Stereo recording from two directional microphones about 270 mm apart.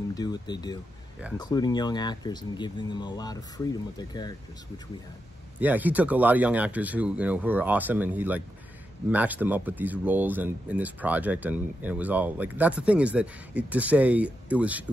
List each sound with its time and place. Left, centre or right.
0.1 s speech: centre
5.6 s speech: centre